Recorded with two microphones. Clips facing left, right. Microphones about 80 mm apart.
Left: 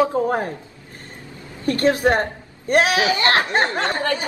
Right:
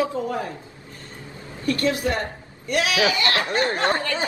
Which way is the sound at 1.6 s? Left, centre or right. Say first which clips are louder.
Left 5 dB; left.